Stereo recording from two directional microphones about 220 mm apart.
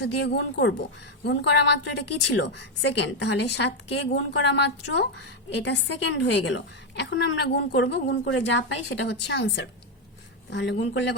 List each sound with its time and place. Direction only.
0.0 s a woman's voice: 50° left (ahead or behind)